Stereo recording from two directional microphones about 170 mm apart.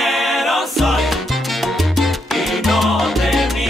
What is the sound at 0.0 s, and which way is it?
Salsa music, centre (ahead or behind).